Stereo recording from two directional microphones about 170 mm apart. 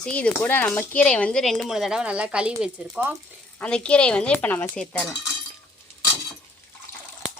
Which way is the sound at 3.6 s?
5° left (ahead or behind).